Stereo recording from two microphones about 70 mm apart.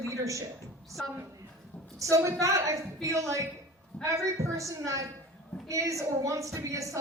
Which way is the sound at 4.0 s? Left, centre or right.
Right.